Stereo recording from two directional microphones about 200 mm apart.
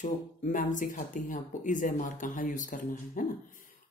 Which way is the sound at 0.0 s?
40° left (ahead or behind).